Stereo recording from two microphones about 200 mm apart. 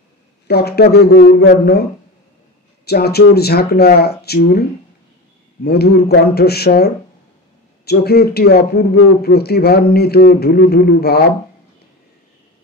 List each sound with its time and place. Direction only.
0.5 s speech: 50° left (ahead or behind)
2.8 s speech: 50° left (ahead or behind)